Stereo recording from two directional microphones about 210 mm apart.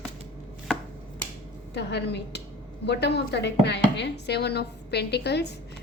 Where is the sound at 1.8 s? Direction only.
55° left (ahead or behind).